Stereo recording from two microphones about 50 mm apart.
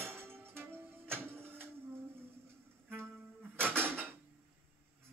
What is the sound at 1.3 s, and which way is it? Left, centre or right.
Printer, right.